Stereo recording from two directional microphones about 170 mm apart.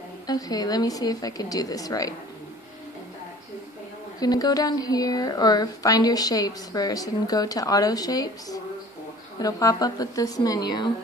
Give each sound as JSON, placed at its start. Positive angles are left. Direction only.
{"t": 0.3, "sound": "a woman's voice", "side_deg": 20}
{"t": 4.2, "sound": "a woman's voice", "side_deg": 20}